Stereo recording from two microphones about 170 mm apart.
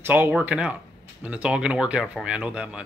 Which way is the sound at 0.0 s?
10° right (ahead or behind).